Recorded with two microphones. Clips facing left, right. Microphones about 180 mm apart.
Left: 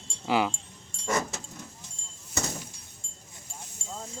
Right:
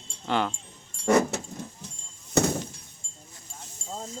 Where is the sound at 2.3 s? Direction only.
60° right (ahead or behind).